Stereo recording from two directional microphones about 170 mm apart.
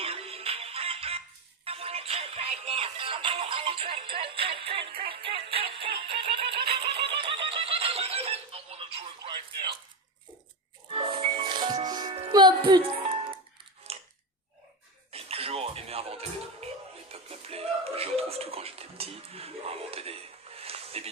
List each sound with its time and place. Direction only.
0.0 s music: 35° right (ahead or behind)
7.1 s neigh: 30° right (ahead or behind)
10.9 s music: 35° right (ahead or behind)
13.9 s a sound: 40° right (ahead or behind)
15.1 s music: 35° right (ahead or behind)
17.1 s a sound: 35° right (ahead or behind)